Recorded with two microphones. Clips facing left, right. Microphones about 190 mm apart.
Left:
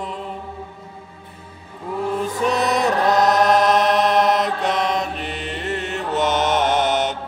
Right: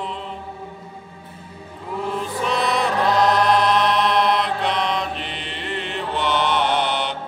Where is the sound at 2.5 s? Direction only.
45° left (ahead or behind).